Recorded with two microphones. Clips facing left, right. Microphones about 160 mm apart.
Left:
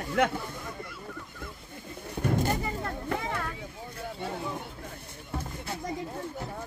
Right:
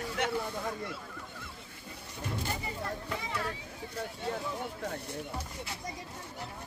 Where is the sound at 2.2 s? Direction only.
50° left (ahead or behind).